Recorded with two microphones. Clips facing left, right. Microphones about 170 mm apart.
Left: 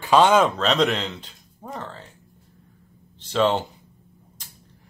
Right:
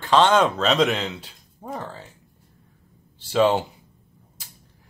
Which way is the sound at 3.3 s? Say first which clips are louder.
Right 2 dB; 5° right (ahead or behind).